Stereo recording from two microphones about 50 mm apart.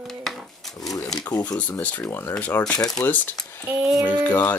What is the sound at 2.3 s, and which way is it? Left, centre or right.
Speech, left.